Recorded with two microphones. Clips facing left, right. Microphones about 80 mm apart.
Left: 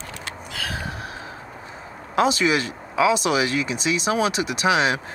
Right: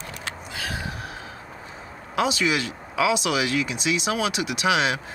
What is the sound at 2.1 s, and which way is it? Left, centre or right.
Speech, left.